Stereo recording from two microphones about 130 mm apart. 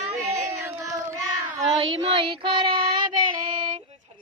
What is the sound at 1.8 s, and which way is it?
Child singing, 45° right (ahead or behind).